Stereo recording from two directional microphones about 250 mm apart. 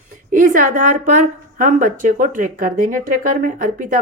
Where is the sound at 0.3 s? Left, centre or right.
Right.